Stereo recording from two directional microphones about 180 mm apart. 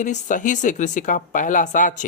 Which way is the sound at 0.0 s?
45° left (ahead or behind).